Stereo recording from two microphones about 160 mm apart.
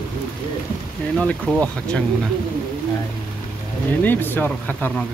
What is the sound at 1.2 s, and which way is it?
Speech, 10° left (ahead or behind).